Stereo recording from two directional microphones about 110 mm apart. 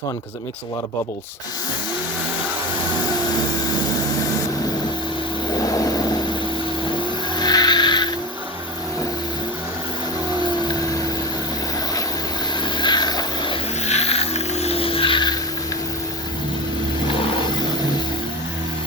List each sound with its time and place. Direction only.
5.5 s vehicle: 35° left (ahead or behind)
7.3 s vehicle: 40° left (ahead or behind)
12.6 s vehicle: 45° left (ahead or behind)
13.8 s vehicle: 75° left (ahead or behind); by 15.4 s 45° left (ahead or behind)
17.1 s vehicle: 50° left (ahead or behind)